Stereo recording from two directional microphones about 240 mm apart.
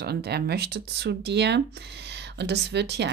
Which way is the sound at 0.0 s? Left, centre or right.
Right.